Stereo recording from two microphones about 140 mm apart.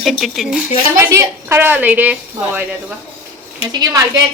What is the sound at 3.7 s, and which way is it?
Speech, 25° right (ahead or behind).